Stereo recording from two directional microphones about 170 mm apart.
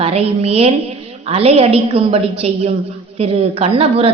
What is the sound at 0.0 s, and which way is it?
Speech, 35° right (ahead or behind).